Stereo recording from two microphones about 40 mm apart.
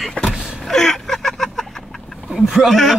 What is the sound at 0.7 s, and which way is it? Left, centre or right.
Vehicle, centre.